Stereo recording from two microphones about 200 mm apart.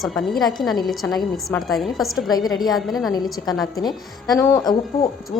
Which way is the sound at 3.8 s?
20° left (ahead or behind).